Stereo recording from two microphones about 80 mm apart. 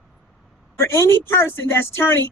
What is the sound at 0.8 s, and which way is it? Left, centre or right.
A man's voice, left.